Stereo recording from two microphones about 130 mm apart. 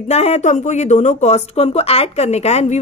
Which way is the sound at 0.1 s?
60° left (ahead or behind).